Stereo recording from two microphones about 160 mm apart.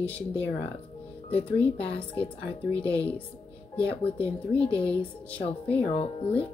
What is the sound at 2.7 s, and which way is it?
Speech, 10° left (ahead or behind).